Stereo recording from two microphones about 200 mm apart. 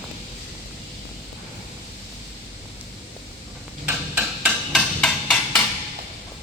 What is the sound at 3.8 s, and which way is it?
Hammer, 5° right (ahead or behind).